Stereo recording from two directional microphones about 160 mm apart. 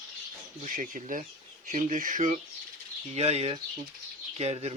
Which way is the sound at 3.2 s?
40° right (ahead or behind).